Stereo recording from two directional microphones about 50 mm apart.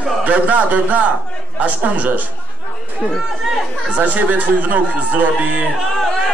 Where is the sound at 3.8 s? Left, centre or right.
Right.